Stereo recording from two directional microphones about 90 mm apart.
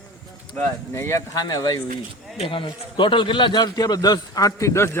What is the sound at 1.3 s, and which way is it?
Speech, 45° left (ahead or behind).